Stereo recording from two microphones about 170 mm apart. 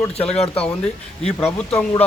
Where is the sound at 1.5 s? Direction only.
10° left (ahead or behind).